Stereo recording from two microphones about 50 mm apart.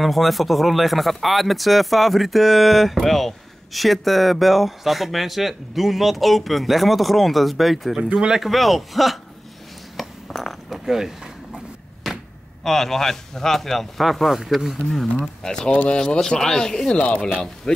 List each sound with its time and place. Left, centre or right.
0.0 s speech: centre
8.0 s speech: centre
8.4 s speech: centre
9.9 s a sound: centre
10.9 s speech: centre
12.1 s a sound: centre
12.6 s speech: centre
15.4 s speech: centre
15.7 s speech: left
16.0 s speech: centre
17.0 s speech: left
17.7 s speech: centre